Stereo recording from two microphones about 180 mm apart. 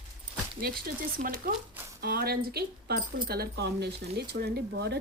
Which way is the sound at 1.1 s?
55° right (ahead or behind).